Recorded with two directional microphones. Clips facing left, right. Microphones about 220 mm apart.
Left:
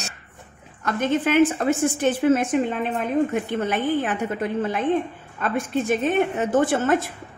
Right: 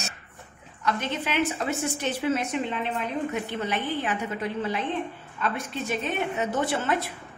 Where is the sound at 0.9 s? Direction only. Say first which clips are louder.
Left 7 dB; 50° left (ahead or behind).